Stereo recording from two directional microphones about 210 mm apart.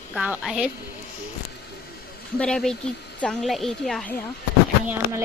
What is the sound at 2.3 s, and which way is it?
A woman's voice, 5° left (ahead or behind).